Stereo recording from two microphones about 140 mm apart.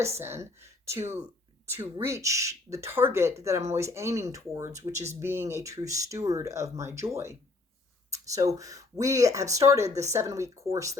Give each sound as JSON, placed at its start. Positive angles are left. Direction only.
{"t": 0.0, "sound": "speech", "side_deg": -20}